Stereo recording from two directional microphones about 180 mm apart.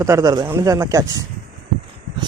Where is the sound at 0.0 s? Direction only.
20° right (ahead or behind).